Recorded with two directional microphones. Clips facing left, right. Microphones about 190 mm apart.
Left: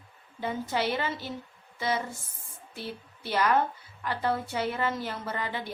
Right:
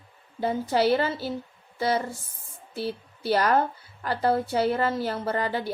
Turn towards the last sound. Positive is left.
turn(degrees=-35)  # may be behind; listen again after turning